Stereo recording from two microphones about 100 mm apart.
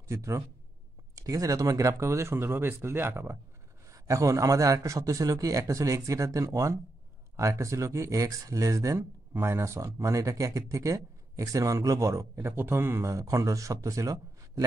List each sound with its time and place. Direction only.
0.1 s speech: 30° right (ahead or behind)